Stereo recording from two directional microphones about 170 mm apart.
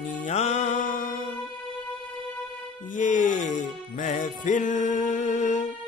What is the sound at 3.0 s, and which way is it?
Music, 50° left (ahead or behind).